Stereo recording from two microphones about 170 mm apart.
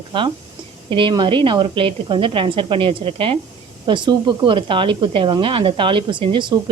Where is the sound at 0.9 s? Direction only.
30° right (ahead or behind).